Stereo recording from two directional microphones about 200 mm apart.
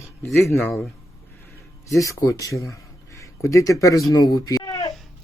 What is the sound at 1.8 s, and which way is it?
Speech, 15° left (ahead or behind).